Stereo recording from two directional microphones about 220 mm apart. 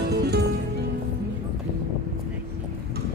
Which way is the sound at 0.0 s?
50° right (ahead or behind).